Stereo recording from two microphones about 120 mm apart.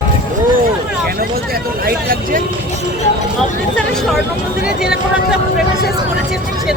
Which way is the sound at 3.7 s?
Centre (ahead or behind).